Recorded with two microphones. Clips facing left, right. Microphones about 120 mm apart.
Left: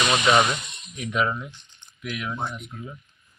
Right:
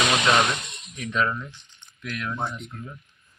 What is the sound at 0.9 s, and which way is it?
Speech, 10° left (ahead or behind).